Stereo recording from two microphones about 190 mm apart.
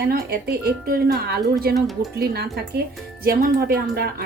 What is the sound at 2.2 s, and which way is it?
A woman's voice, 55° right (ahead or behind).